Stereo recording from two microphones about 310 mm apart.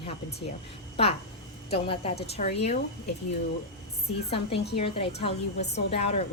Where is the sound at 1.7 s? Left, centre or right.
Centre.